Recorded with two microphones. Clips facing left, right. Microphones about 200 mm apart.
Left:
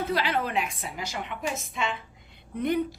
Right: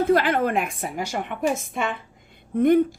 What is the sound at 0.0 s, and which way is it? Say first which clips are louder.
Speech: right 8 dB; 50° right (ahead or behind).